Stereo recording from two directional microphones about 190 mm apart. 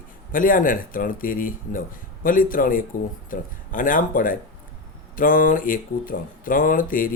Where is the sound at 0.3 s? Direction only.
45° left (ahead or behind).